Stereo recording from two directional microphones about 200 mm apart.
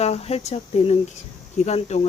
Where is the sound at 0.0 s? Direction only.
30° left (ahead or behind).